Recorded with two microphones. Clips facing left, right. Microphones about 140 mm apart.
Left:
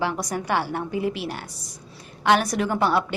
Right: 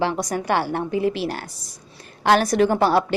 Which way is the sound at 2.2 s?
35° right (ahead or behind).